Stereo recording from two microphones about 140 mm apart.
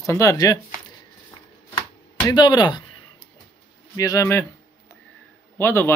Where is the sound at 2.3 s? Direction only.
30° left (ahead or behind).